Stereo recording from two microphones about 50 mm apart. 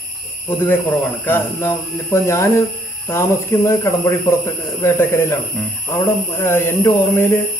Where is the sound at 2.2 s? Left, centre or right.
Left.